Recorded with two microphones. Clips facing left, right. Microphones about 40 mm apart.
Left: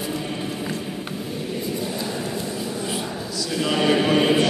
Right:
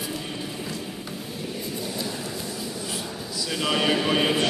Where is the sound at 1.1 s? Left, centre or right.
Centre.